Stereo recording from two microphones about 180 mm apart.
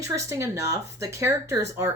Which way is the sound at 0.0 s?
15° right (ahead or behind).